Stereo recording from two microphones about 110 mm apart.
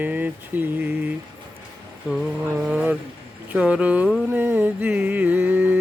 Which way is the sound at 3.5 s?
10° right (ahead or behind).